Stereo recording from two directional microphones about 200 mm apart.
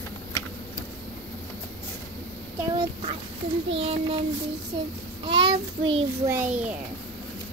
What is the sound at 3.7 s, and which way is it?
Child singing, 30° right (ahead or behind).